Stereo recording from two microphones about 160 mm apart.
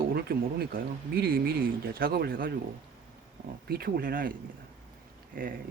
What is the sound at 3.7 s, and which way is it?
Speech, 75° right (ahead or behind).